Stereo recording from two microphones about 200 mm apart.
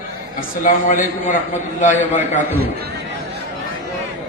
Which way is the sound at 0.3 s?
40° left (ahead or behind).